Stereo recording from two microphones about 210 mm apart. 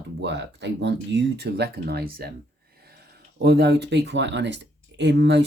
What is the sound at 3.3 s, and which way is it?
Speech, 55° right (ahead or behind).